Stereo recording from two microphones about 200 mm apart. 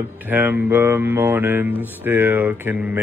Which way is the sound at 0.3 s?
10° right (ahead or behind).